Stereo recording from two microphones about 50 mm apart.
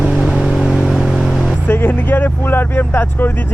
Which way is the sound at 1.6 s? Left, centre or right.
Left.